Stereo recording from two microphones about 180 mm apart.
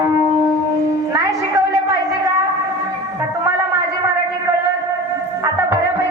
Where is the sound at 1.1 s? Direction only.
20° right (ahead or behind).